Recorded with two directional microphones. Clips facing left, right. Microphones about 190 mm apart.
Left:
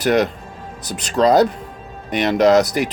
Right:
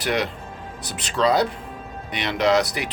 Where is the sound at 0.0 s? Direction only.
45° left (ahead or behind).